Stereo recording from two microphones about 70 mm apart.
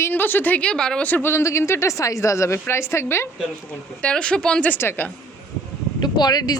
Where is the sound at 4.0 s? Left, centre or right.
Centre.